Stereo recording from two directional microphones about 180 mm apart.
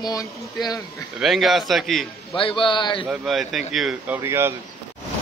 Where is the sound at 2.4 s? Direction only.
30° left (ahead or behind).